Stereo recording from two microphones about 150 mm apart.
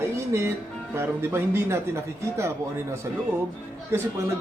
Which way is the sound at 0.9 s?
15° right (ahead or behind).